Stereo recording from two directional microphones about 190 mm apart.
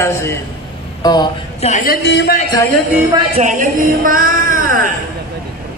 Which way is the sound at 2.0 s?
65° left (ahead or behind).